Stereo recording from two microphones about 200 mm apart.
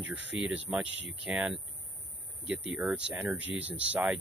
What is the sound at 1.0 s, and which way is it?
Speech, 65° right (ahead or behind).